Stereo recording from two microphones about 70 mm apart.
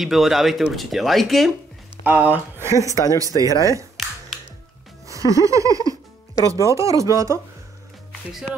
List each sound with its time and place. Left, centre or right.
0.0 s speech: centre
2.0 s speech: right
2.6 s speech: right
2.9 s speech: left
3.2 s speech: right
5.0 s music: right
6.4 s speech: right